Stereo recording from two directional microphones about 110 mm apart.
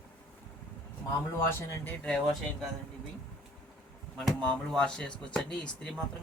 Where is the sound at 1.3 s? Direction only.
25° left (ahead or behind).